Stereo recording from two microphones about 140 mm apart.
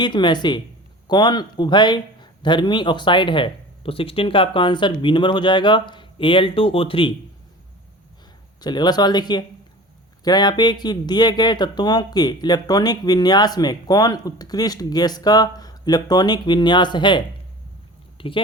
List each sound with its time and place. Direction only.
0.0 s speech: 35° left (ahead or behind)
8.6 s speech: 30° left (ahead or behind)